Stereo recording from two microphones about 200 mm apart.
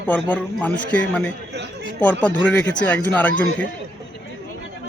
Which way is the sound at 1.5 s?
55° right (ahead or behind).